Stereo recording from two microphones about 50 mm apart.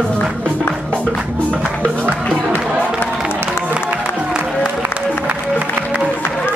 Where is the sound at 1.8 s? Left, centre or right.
Left.